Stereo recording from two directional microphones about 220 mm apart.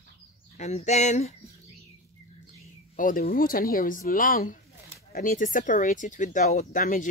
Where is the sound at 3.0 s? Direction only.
40° left (ahead or behind).